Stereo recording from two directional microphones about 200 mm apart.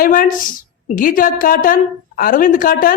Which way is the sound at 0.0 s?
45° left (ahead or behind).